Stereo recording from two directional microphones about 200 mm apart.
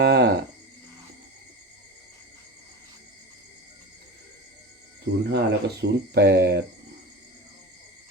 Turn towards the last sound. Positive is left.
turn(degrees=-55)  # may be behind; listen again after turning